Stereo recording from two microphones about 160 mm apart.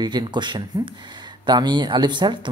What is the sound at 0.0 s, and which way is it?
Speech, 25° right (ahead or behind).